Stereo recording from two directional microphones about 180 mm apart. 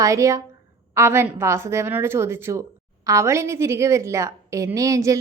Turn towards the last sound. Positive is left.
turn(degrees=-20)  # may be behind; listen again after turning